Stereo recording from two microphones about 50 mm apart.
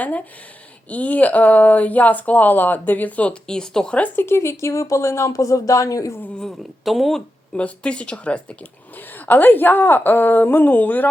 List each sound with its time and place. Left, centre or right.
0.0 s speech: left
3.4 s speech: centre
3.9 s speech: left
4.3 s speech: left
6.8 s speech: centre
7.5 s speech: left
9.1 s speech: left